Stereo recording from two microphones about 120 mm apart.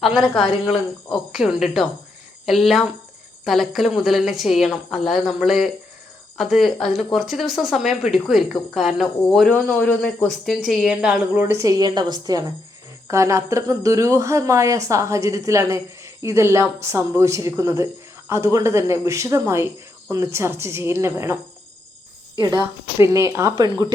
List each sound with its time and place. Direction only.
0.0 s speech: centre (ahead or behind)
9.5 s a man's voice: 15° left (ahead or behind)
10.0 s speech: centre (ahead or behind)
11.3 s a woman's voice: 20° right (ahead or behind)
23.0 s speech: 25° right (ahead or behind)